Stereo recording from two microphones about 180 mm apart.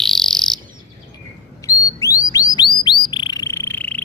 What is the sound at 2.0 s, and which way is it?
Bird, 20° left (ahead or behind).